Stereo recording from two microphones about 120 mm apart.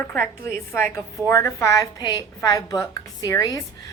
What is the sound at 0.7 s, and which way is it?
A woman's voice, 20° left (ahead or behind).